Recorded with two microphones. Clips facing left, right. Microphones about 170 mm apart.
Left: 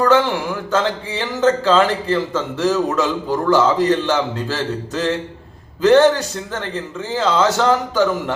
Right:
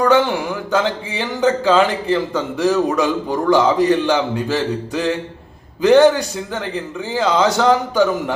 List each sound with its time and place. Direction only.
0.0 s speech: 15° right (ahead or behind)